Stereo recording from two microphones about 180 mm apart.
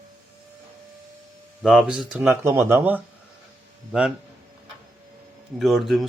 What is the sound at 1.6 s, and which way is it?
Speech, centre (ahead or behind).